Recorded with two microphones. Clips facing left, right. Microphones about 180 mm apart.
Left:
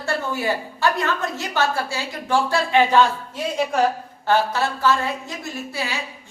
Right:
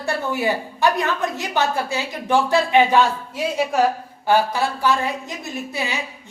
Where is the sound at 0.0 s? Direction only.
15° right (ahead or behind).